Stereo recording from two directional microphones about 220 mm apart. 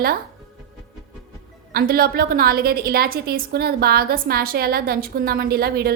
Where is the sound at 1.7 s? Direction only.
45° right (ahead or behind).